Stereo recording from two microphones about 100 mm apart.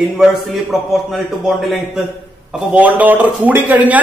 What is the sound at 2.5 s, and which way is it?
A man's voice, 15° right (ahead or behind).